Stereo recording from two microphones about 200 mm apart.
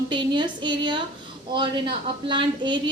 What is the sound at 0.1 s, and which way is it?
A woman's voice, 25° right (ahead or behind).